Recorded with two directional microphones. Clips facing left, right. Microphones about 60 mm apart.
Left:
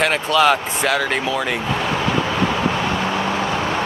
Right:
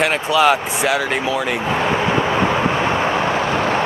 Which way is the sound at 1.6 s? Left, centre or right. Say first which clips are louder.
Right 3 dB; right.